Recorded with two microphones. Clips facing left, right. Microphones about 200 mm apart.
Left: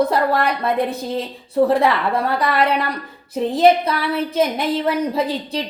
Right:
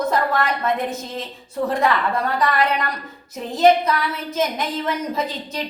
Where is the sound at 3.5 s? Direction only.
30° left (ahead or behind).